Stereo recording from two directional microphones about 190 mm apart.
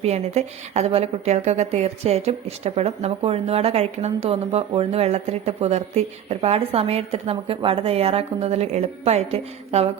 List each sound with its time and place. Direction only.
0.0 s a woman's voice: 35° right (ahead or behind)